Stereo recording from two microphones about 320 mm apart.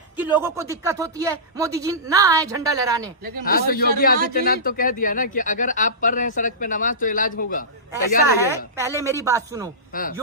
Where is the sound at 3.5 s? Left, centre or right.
Left.